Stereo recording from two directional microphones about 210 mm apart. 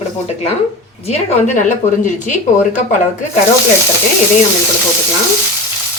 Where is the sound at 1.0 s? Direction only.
30° left (ahead or behind).